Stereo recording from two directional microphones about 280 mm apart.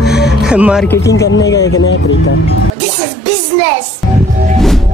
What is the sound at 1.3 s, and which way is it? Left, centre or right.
Speech, left.